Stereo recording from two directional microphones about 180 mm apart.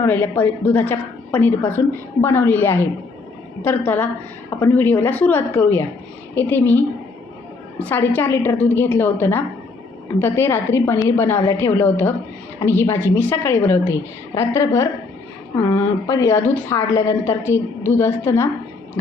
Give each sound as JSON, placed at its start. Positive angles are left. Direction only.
{"t": 0.0, "sound": "a woman's voice", "side_deg": 10}